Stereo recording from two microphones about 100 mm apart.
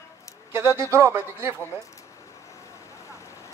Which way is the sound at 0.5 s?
25° right (ahead or behind).